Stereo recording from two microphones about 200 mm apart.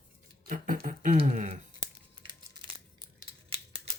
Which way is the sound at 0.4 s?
40° right (ahead or behind).